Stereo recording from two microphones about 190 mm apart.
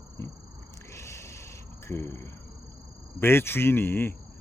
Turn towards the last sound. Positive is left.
turn(degrees=10)  # may be behind; listen again after turning